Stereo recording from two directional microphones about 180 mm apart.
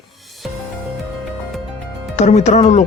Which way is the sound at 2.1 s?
40° left (ahead or behind).